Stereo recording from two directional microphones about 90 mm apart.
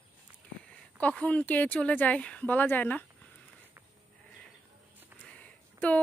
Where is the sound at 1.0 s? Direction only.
15° left (ahead or behind).